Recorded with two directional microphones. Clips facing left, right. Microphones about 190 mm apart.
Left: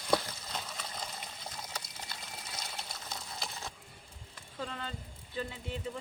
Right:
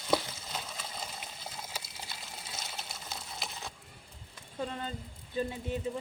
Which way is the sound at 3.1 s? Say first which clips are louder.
Even; centre (ahead or behind).